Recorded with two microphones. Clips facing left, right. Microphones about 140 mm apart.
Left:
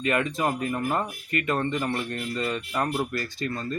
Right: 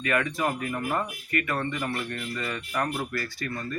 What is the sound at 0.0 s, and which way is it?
Speech, 20° left (ahead or behind).